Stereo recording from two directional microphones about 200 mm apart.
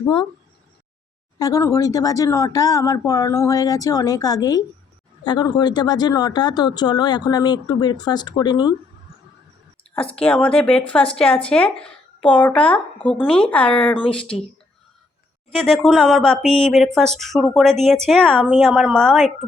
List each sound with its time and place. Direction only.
1.4 s speech: 15° left (ahead or behind)
9.9 s speech: 5° left (ahead or behind)
14.0 s speech: 25° left (ahead or behind)
15.5 s speech: centre (ahead or behind)